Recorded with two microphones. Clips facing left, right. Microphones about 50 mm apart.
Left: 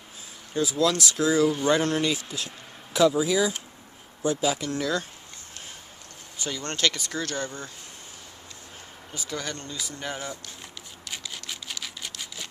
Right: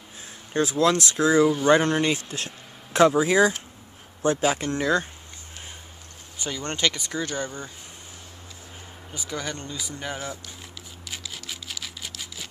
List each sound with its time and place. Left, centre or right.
0.5 s speech: right
2.1 s speech: right
6.4 s speech: centre
9.1 s speech: centre
11.1 s a sound: centre